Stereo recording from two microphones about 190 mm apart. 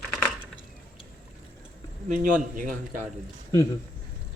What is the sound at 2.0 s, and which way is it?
Speech, 45° right (ahead or behind).